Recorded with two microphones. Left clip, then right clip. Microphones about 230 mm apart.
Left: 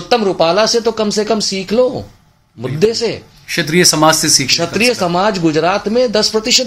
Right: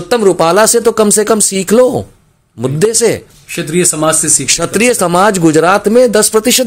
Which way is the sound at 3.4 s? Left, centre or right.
Centre.